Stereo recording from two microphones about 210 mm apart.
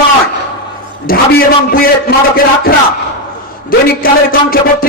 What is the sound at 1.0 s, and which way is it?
A man's voice, 45° left (ahead or behind).